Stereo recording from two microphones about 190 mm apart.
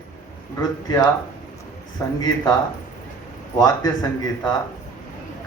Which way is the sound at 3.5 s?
20° left (ahead or behind).